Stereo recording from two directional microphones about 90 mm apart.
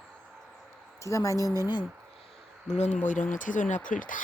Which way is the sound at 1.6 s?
55° left (ahead or behind).